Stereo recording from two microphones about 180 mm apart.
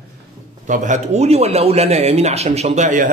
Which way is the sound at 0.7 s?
45° right (ahead or behind).